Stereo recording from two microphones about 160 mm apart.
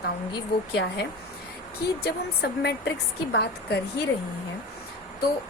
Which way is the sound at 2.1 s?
90° left.